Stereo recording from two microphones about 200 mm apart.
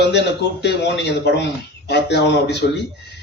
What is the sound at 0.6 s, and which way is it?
A man's voice, 60° left (ahead or behind).